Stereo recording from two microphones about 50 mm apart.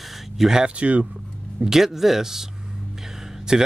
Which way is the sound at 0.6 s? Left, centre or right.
Right.